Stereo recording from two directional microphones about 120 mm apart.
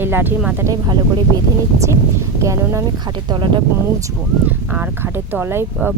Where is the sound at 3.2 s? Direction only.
40° right (ahead or behind).